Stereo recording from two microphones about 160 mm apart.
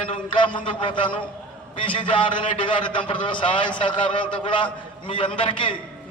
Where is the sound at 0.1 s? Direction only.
30° left (ahead or behind).